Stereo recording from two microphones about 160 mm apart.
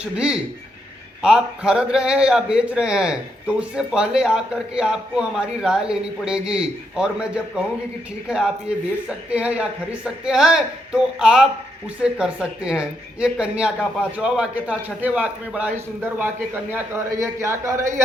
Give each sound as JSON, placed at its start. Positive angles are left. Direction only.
{"t": 0.0, "sound": "a man's voice", "side_deg": -5}